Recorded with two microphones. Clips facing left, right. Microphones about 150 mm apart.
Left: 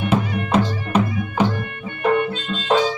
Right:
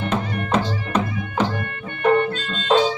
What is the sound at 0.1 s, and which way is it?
Music, 10° left (ahead or behind).